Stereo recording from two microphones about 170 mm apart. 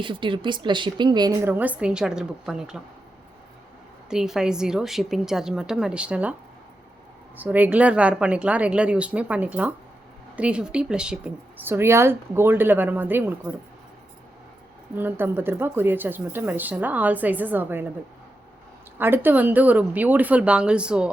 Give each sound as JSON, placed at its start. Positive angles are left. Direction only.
{"t": 0.0, "sound": "a woman's voice", "side_deg": -30}
{"t": 4.1, "sound": "a woman's voice", "side_deg": -5}
{"t": 7.3, "sound": "speech", "side_deg": -10}
{"t": 14.9, "sound": "speech", "side_deg": -10}
{"t": 18.9, "sound": "speech", "side_deg": -10}